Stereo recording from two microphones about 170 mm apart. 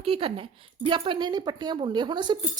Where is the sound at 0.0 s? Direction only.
30° right (ahead or behind).